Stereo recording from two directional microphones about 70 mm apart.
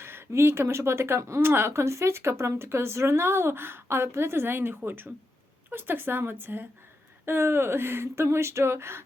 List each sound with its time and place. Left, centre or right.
0.0 s speech: right